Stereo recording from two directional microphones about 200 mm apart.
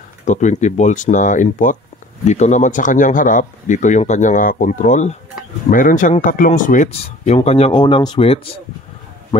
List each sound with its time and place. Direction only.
0.2 s speech: 35° left (ahead or behind)